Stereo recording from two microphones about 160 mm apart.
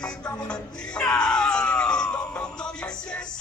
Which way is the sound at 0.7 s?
5° left (ahead or behind).